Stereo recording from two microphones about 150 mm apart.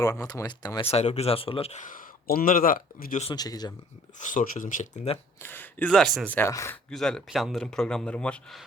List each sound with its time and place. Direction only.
0.0 s speech: 20° left (ahead or behind)
0.9 s speech: 45° left (ahead or behind)
1.8 s speech: 65° left (ahead or behind)
3.3 s speech: 25° left (ahead or behind)
4.2 s speech: 60° left (ahead or behind)
5.4 s speech: 15° left (ahead or behind)
5.9 s speech: centre (ahead or behind)
6.3 s speech: 20° left (ahead or behind)
6.9 s speech: centre (ahead or behind)